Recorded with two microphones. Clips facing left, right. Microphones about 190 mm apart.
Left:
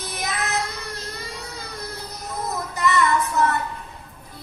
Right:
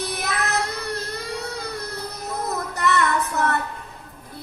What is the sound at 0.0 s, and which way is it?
Child singing, 60° right (ahead or behind).